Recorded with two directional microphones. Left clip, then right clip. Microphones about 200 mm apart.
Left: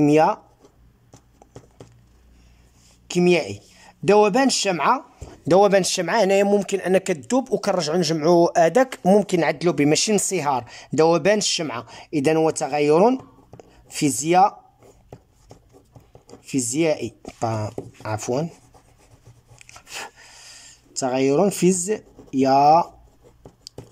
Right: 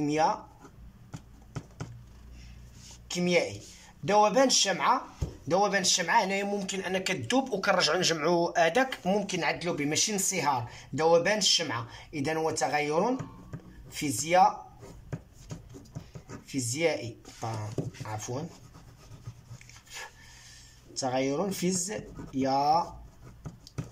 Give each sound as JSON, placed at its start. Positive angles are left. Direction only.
{"t": 0.0, "sound": "speech", "side_deg": 55}
{"t": 3.1, "sound": "speech", "side_deg": 50}
{"t": 16.4, "sound": "speech", "side_deg": 55}
{"t": 21.0, "sound": "speech", "side_deg": 50}